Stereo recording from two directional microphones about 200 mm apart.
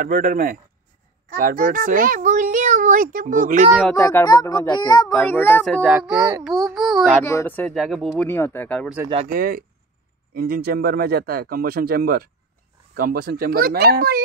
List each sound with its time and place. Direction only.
0.0 s speech: 45° right (ahead or behind)
3.9 s a child's voice: 15° left (ahead or behind); by 7.2 s centre (ahead or behind)
7.2 s speech: 10° left (ahead or behind)
9.3 s speech: 45° right (ahead or behind)